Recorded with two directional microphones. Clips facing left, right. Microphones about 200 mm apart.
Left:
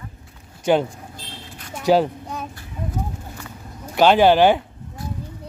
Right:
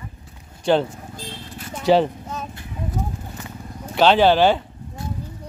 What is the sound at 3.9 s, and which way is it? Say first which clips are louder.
Speech: left 1 dB; 10° left (ahead or behind).